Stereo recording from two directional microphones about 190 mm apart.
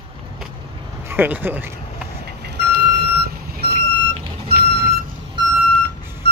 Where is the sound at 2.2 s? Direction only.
60° right (ahead or behind).